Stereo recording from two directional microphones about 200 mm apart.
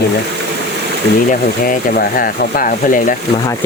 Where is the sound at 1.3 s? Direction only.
45° left (ahead or behind).